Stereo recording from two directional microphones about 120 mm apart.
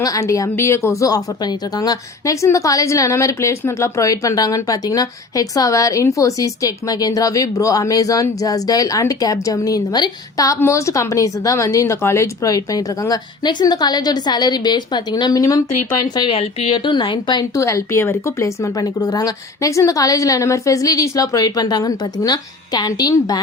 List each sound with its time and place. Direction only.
0.0 s a woman's voice: 30° left (ahead or behind)
16.1 s a woman's voice: 40° left (ahead or behind)
16.4 s a woman's voice: 55° left (ahead or behind)
16.7 s a woman's voice: 40° left (ahead or behind)
17.6 s a woman's voice: 25° left (ahead or behind)